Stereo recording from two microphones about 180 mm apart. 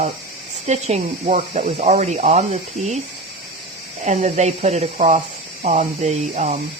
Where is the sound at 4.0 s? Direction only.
40° right (ahead or behind).